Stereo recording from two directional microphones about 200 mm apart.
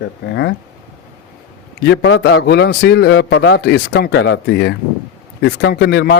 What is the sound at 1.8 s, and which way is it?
Speech, 60° left (ahead or behind).